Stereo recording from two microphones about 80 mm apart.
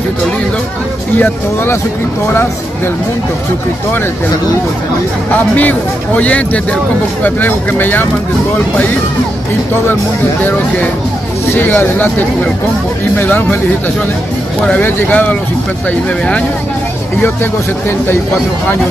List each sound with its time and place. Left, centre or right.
1.1 s speech: left
5.3 s speech: left
11.5 s speech: left
14.8 s speech: left
17.2 s speech: left